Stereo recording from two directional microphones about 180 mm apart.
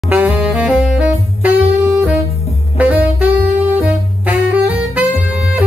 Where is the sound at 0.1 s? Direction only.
5° right (ahead or behind).